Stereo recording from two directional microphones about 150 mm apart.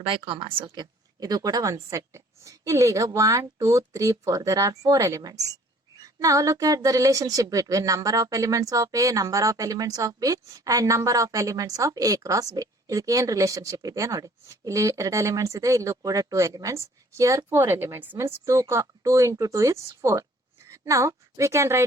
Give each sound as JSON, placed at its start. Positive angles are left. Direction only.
{"t": 0.1, "sound": "a woman's voice", "side_deg": -35}